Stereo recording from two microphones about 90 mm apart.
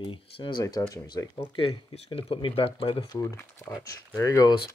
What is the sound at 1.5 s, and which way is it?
Speech, 85° left.